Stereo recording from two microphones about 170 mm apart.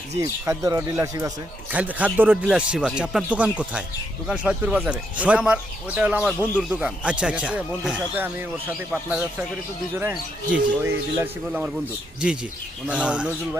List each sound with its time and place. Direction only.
0.2 s speech: 20° right (ahead or behind)
1.7 s speech: 10° right (ahead or behind)
12.9 s speech: 5° right (ahead or behind)